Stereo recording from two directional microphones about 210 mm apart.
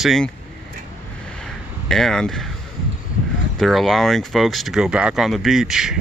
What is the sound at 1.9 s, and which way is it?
Speech, 5° left (ahead or behind).